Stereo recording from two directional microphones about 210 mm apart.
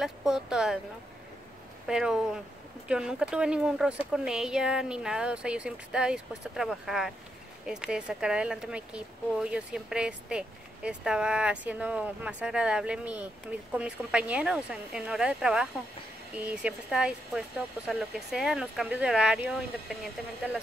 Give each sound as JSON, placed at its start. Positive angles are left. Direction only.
{"t": 0.0, "sound": "speech", "side_deg": 0}
{"t": 1.9, "sound": "speech", "side_deg": -5}